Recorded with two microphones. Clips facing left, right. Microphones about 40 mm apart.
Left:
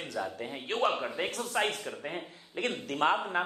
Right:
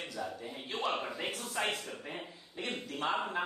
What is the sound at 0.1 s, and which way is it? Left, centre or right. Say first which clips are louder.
Speech: left 5 dB; left.